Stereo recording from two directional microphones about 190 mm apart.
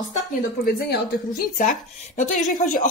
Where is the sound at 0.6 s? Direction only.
50° left (ahead or behind).